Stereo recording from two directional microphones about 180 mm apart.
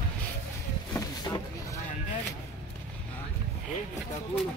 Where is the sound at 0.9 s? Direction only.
20° left (ahead or behind).